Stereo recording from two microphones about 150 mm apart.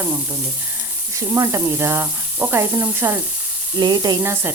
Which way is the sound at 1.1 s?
20° right (ahead or behind).